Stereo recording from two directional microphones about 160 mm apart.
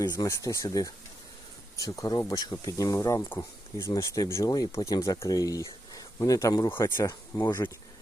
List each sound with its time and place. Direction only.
0.0 s speech: 20° left (ahead or behind)